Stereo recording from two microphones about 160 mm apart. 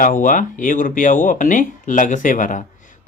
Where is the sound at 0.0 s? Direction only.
55° left (ahead or behind).